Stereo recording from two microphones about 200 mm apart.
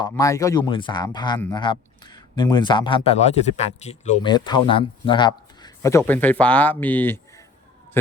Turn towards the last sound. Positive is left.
turn(degrees=10)  # may be behind; listen again after turning